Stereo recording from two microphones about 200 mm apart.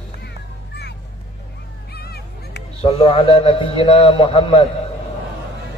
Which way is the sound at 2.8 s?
25° left (ahead or behind).